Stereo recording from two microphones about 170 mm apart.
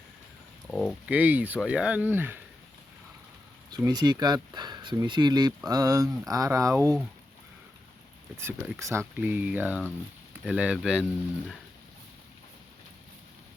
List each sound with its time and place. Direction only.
0.7 s a sound: centre (ahead or behind)
1.1 s speech: 10° right (ahead or behind)
3.7 s speech: 25° right (ahead or behind)
8.4 s speech: 15° right (ahead or behind)